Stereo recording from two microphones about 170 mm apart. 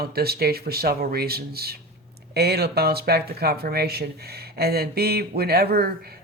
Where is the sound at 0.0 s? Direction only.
65° right (ahead or behind).